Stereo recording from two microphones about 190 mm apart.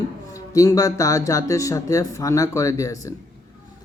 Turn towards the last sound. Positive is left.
turn(degrees=15)  # may be behind; listen again after turning